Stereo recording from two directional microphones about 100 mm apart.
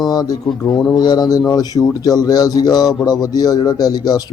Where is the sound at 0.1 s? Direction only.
40° left (ahead or behind).